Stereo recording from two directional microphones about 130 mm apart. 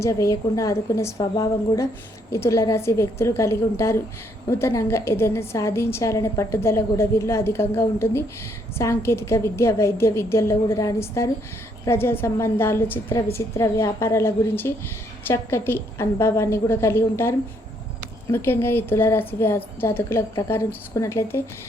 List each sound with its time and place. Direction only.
0.0 s a woman's voice: 25° left (ahead or behind)